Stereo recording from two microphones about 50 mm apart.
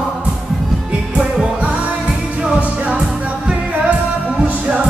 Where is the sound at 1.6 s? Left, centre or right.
Right.